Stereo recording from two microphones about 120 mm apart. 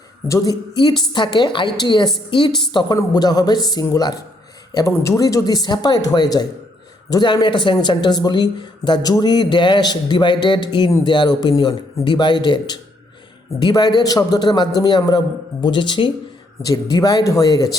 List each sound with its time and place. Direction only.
0.3 s a woman's voice: 25° left (ahead or behind)
0.8 s speech: 40° left (ahead or behind)
16.6 s speech: 30° left (ahead or behind)